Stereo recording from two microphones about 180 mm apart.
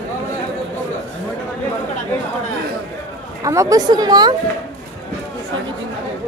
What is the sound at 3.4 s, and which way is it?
Speech, 15° right (ahead or behind).